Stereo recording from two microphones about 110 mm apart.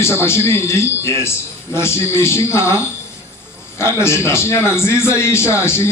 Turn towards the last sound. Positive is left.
turn(degrees=25)  # may be behind; listen again after turning